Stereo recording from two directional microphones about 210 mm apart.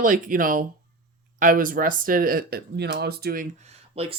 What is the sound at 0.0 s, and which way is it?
Speech, 40° right (ahead or behind).